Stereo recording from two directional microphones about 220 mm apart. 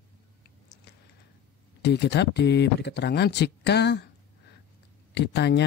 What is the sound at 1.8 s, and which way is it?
Speech, 50° left (ahead or behind).